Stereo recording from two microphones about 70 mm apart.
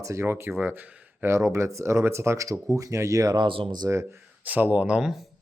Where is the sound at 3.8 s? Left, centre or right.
Right.